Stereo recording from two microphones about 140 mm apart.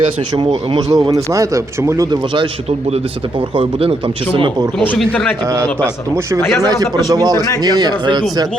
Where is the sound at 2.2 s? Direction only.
35° right (ahead or behind).